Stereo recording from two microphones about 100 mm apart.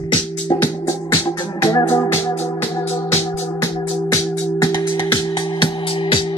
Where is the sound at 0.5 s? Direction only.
35° left (ahead or behind).